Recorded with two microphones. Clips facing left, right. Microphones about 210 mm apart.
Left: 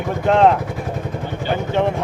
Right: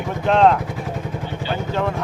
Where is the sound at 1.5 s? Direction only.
20° left (ahead or behind).